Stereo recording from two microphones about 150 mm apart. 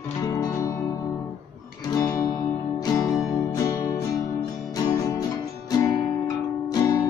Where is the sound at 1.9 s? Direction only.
25° left (ahead or behind).